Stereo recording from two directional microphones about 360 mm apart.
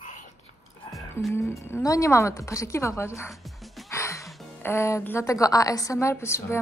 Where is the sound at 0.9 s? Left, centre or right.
Centre.